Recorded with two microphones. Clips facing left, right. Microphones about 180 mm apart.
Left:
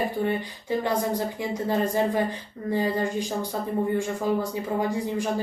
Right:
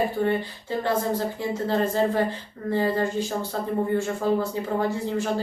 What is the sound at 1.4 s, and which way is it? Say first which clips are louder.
Speech: even; 15° left (ahead or behind).